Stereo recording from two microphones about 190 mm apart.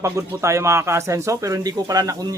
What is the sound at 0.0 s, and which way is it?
Speech, 15° right (ahead or behind).